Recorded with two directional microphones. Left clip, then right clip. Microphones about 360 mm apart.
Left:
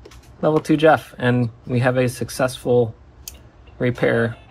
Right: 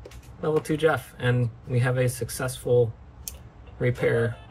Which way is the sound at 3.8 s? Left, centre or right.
Centre.